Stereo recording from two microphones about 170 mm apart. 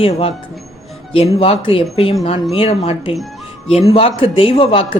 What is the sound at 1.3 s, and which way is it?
Speech, 35° left (ahead or behind).